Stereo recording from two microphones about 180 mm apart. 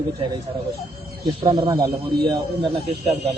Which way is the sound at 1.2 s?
25° right (ahead or behind).